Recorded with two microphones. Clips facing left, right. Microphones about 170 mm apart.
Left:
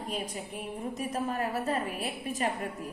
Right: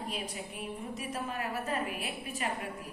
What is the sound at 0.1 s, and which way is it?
A woman's voice, 40° left (ahead or behind).